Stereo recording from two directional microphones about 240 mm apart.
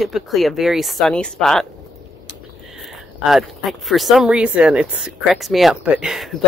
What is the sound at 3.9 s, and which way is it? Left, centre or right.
Speech, centre.